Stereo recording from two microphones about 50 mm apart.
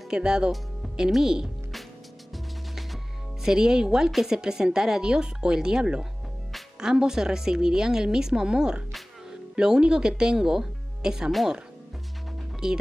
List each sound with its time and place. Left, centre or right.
0.1 s a woman's voice: centre
2.3 s music: centre
3.4 s a woman's voice: centre
12.6 s a woman's voice: centre